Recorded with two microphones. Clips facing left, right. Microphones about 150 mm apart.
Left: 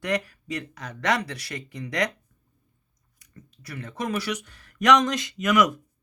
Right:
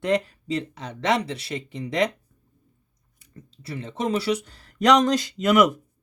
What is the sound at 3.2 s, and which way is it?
Speech, 30° right (ahead or behind).